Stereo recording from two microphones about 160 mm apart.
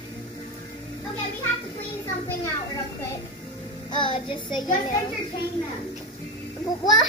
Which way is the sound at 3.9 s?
30° left (ahead or behind).